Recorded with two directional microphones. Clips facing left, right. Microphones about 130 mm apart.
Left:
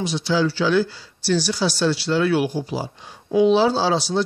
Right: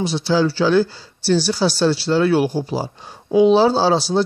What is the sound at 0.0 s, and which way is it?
Speech, 30° right (ahead or behind).